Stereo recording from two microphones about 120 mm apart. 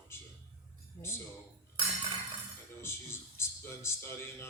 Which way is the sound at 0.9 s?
30° left (ahead or behind).